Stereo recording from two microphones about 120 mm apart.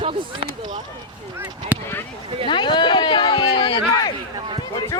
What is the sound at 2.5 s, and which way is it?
Speech, 40° left (ahead or behind).